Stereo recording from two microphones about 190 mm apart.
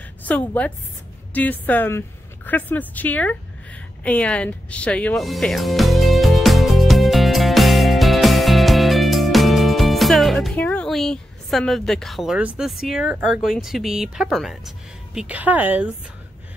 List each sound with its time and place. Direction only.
0.2 s a woman's voice: 10° left (ahead or behind)
4.0 s music: 5° left (ahead or behind)
15.1 s a woman's voice: 5° right (ahead or behind)